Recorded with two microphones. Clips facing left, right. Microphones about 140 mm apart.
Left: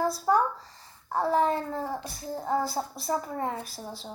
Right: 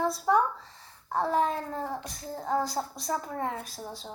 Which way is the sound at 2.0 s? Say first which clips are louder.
Left 2 dB; 10° left (ahead or behind).